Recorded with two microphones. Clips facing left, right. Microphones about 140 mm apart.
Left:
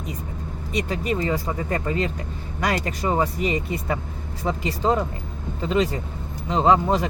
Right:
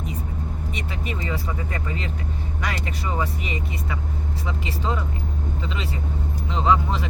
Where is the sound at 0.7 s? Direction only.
40° left (ahead or behind).